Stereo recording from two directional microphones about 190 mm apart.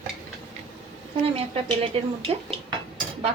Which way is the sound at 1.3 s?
30° right (ahead or behind).